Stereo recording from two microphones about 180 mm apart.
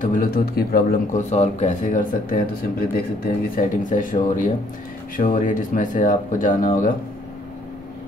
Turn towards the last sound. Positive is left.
turn(degrees=50)  # may be behind; listen again after turning